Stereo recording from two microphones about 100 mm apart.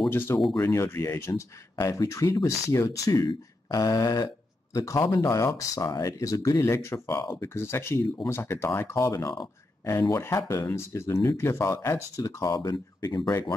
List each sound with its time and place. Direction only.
0.1 s speech: 20° left (ahead or behind)
3.3 s speech: 50° left (ahead or behind)
3.8 s speech: 35° left (ahead or behind)
12.2 s speech: 35° left (ahead or behind)